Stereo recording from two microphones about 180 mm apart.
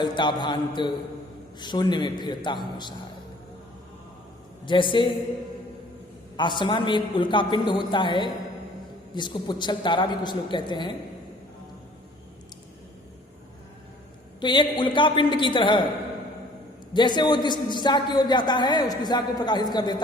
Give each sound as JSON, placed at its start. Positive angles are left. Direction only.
{"t": 0.0, "sound": "a man's voice", "side_deg": 25}
{"t": 4.6, "sound": "a man's voice", "side_deg": 25}
{"t": 6.3, "sound": "a man's voice", "side_deg": 25}
{"t": 14.4, "sound": "a man's voice", "side_deg": 25}
{"t": 16.9, "sound": "a man's voice", "side_deg": 25}